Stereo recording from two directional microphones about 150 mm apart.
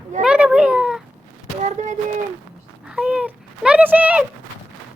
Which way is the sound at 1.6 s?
50° right (ahead or behind).